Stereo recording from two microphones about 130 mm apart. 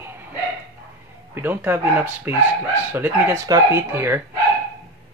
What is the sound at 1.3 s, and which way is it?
Speech, 15° right (ahead or behind).